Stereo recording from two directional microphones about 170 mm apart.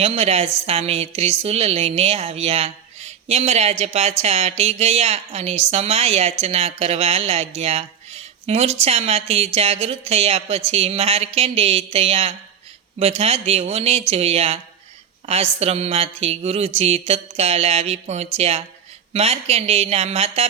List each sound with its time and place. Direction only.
0.0 s a woman's voice: 35° right (ahead or behind)